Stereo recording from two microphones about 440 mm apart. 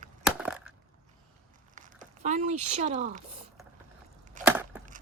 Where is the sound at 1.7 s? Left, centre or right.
Centre.